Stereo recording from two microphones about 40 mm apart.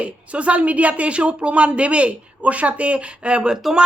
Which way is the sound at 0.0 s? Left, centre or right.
Right.